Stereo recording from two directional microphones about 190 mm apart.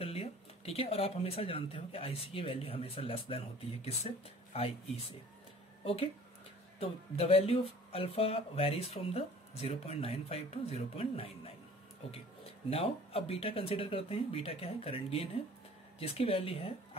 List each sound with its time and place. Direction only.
0.0 s speech: 30° left (ahead or behind)
6.8 s speech: 30° left (ahead or behind)
12.6 s speech: 30° left (ahead or behind)